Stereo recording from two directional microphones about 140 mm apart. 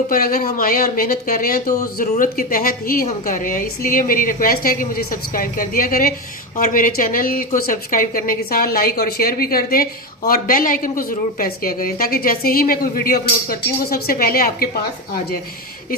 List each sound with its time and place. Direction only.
0.1 s a woman's voice: 90° left
3.1 s a woman's voice: 70° left (ahead or behind); by 6.1 s 90° left
6.6 s a woman's voice: 75° left (ahead or behind); by 14.7 s 90° left